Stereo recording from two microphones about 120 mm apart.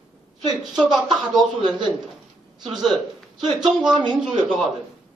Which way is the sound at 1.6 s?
40° right (ahead or behind).